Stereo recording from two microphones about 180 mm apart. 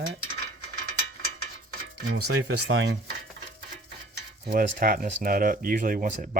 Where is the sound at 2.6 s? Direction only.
90° right.